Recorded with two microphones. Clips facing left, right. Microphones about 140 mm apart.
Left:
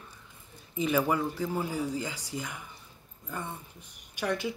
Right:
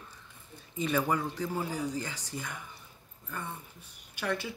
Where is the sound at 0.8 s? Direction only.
5° left (ahead or behind).